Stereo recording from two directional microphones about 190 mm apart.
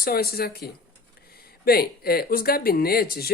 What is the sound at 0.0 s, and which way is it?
Speech, 55° left (ahead or behind).